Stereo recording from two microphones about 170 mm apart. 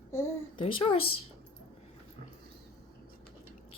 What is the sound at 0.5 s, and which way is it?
Speech, 35° left (ahead or behind).